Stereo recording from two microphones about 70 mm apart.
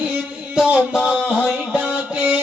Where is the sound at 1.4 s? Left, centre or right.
Centre.